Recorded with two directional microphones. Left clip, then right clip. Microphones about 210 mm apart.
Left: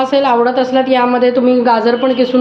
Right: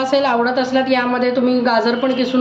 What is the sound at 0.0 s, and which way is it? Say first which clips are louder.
A woman's voice: left 4 dB; 20° left (ahead or behind).